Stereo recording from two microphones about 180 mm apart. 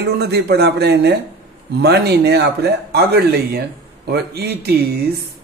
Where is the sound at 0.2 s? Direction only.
65° right (ahead or behind).